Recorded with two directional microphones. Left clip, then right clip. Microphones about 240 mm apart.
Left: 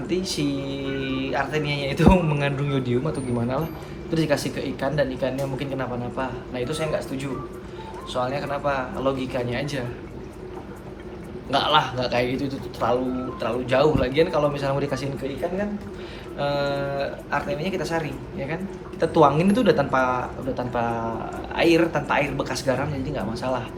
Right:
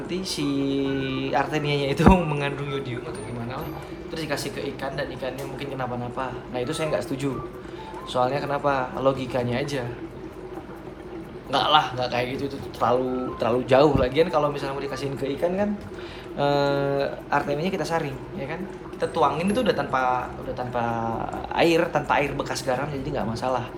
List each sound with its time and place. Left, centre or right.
0.1 s speech: centre
4.1 s speech: centre
11.5 s speech: centre
16.4 s speech: centre